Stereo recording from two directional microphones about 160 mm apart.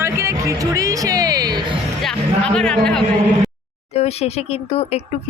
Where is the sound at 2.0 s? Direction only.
5° left (ahead or behind).